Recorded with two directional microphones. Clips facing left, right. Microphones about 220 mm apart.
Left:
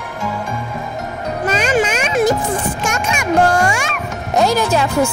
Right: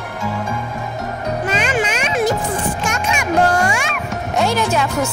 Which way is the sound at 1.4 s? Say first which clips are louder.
Left 5 dB; 40° left (ahead or behind).